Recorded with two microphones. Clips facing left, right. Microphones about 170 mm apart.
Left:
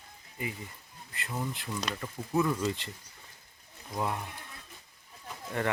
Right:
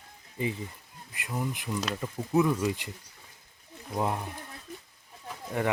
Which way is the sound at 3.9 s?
20° right (ahead or behind).